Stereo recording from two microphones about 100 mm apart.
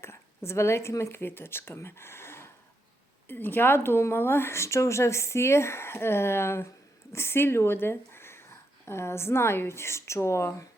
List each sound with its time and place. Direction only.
0.0 s speech: 25° left (ahead or behind)